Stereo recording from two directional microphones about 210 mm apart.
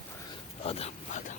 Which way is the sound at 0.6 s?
30° left (ahead or behind).